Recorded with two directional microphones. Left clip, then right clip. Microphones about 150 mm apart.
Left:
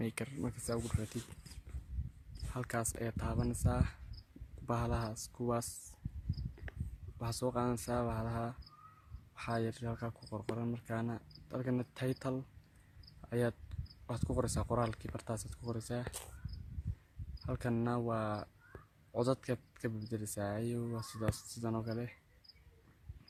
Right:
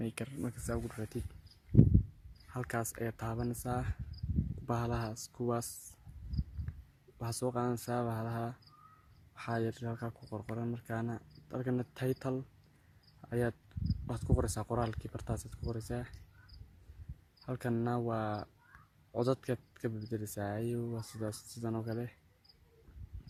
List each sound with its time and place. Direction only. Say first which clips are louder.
0.0 s speech: even; centre (ahead or behind)
2.5 s speech: right 1 dB; 15° right (ahead or behind)
7.2 s speech: right 1 dB; 15° right (ahead or behind)
17.4 s speech: right 1 dB; 15° right (ahead or behind)